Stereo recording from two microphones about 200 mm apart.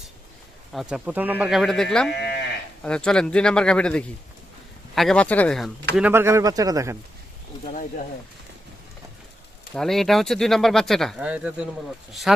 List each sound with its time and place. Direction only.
0.7 s speech: centre (ahead or behind)
2.0 s livestock: 55° left (ahead or behind)
2.8 s speech: 5° left (ahead or behind)
6.0 s a man's voice: 10° right (ahead or behind)
9.7 s speech: centre (ahead or behind)